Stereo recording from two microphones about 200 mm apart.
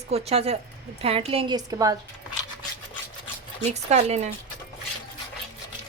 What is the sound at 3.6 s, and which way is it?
Speech, 35° right (ahead or behind).